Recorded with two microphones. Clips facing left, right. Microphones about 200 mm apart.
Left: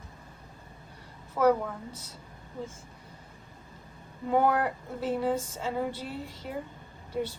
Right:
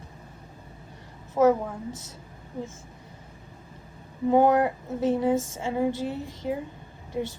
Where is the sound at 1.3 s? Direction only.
25° right (ahead or behind).